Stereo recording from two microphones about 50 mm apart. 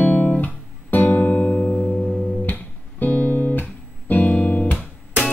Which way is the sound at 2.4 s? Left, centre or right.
Left.